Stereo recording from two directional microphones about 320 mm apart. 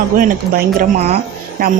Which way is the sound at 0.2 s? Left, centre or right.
Right.